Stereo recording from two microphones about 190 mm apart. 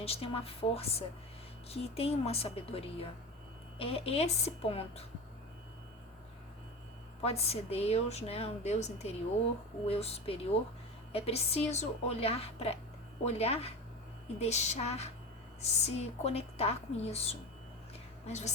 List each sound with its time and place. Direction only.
0.0 s a woman's voice: 30° left (ahead or behind)
7.2 s a woman's voice: 35° left (ahead or behind)